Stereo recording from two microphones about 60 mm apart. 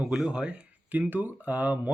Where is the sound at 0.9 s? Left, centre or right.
Right.